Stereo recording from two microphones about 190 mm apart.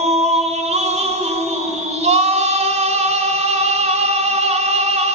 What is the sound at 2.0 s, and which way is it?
Female singing, 35° right (ahead or behind).